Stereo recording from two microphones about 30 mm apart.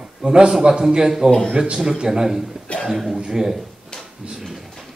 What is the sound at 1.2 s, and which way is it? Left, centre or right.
Speech, centre.